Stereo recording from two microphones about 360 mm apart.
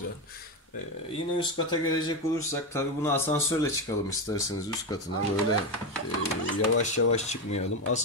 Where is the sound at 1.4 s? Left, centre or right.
Centre.